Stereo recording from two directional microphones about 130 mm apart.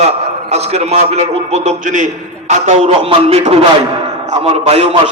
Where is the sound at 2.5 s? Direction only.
60° right (ahead or behind).